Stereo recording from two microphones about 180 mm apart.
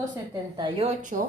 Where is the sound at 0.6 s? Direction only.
30° right (ahead or behind).